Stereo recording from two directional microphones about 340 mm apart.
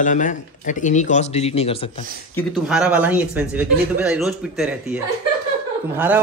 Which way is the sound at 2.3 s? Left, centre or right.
Centre.